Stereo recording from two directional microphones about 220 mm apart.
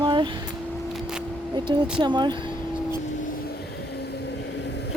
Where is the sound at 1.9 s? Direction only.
20° right (ahead or behind).